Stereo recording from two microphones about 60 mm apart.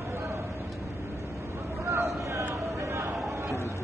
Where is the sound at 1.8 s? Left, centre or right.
Right.